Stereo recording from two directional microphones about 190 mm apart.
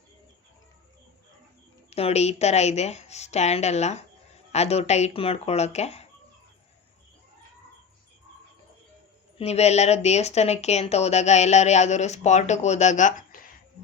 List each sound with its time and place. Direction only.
1.9 s speech: 35° left (ahead or behind)
9.4 s speech: 35° left (ahead or behind)